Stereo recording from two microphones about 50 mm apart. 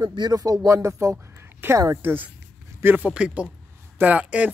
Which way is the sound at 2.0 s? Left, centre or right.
Right.